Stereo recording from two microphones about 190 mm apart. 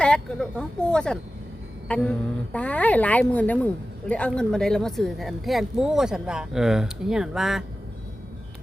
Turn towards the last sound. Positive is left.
turn(degrees=0)  # may be behind; listen again after turning